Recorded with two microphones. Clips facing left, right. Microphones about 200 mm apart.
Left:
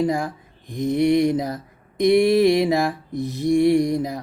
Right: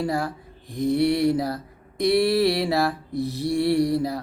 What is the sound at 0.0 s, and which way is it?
Mantra, 15° left (ahead or behind).